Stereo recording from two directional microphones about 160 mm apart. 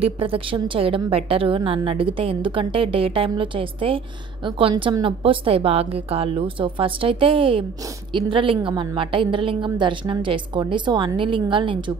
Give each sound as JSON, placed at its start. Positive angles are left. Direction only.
{"t": 0.0, "sound": "a woman's voice", "side_deg": -35}